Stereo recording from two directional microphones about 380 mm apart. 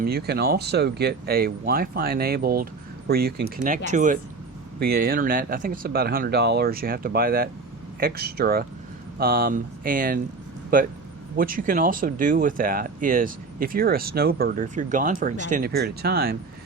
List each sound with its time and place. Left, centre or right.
0.0 s speech: right
11.3 s speech: right